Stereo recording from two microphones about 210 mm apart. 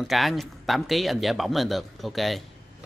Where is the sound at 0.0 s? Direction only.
Centre (ahead or behind).